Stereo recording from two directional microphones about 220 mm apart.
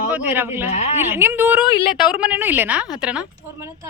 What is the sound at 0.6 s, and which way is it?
Speech, 30° left (ahead or behind).